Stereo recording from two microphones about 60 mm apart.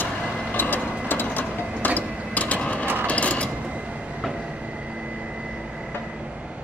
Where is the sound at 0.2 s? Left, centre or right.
Centre.